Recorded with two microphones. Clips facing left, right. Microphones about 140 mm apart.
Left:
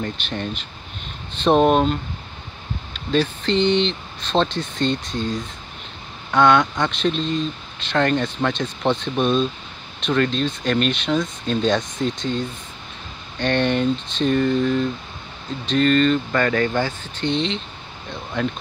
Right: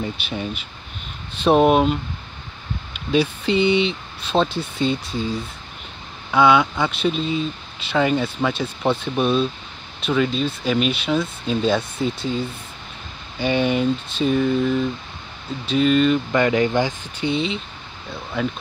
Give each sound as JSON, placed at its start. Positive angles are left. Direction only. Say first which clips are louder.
{"t": 0.0, "sound": "speech", "louder": "even", "side_deg": -10}